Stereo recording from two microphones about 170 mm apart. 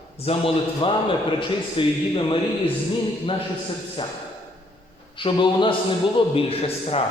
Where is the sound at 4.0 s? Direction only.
30° left (ahead or behind).